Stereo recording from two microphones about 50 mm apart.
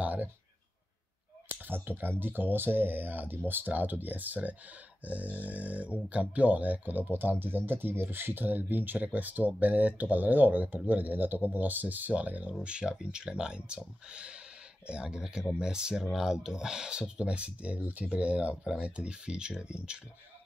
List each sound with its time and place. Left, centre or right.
0.0 s a sound: right
1.6 s speech: right
12.6 s speech: centre